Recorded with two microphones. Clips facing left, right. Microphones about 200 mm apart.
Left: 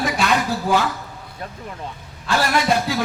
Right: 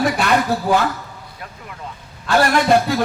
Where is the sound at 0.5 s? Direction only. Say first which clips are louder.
Right 4 dB; 60° right (ahead or behind).